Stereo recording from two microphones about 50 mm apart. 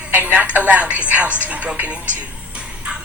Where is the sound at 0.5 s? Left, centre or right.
Right.